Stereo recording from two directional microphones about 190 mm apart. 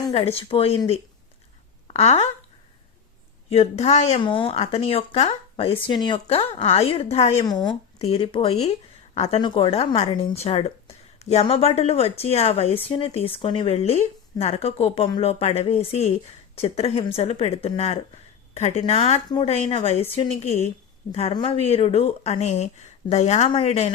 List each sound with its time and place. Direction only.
0.1 s a woman's voice: 30° left (ahead or behind)
3.5 s a woman's voice: 35° left (ahead or behind)
7.4 s a woman's voice: 20° left (ahead or behind)
19.6 s a woman's voice: 35° left (ahead or behind)